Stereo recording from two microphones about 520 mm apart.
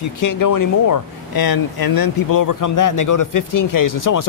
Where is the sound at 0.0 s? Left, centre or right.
Left.